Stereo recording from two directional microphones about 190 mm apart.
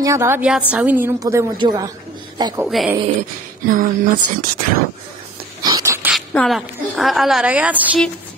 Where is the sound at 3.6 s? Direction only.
45° right (ahead or behind).